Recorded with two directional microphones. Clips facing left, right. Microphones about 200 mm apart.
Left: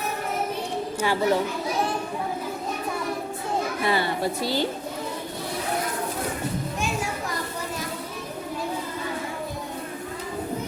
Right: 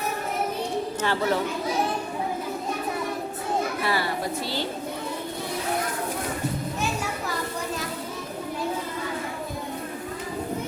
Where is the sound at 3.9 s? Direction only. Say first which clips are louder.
Left 2 dB; 25° left (ahead or behind).